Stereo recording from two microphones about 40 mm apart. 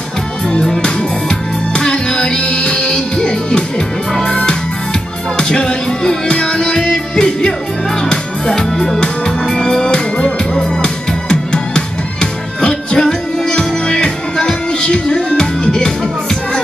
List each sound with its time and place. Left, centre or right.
1.7 s music: left
9.9 s music: left